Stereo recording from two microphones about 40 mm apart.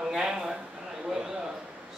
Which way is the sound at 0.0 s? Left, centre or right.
Centre.